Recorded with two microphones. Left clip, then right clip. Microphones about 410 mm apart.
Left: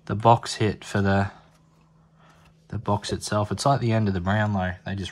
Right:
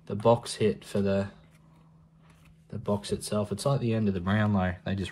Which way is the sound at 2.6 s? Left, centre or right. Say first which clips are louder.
Left 4 dB; left.